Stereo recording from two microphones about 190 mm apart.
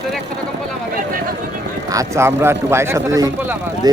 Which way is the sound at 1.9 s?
15° right (ahead or behind).